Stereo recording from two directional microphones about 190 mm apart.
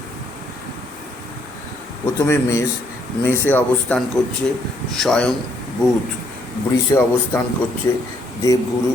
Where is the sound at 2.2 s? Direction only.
15° left (ahead or behind).